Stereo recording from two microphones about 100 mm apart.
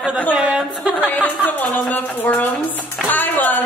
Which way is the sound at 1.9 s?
15° left (ahead or behind).